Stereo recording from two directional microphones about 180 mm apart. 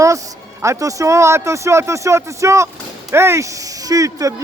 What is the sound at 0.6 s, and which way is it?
Speech, 15° right (ahead or behind).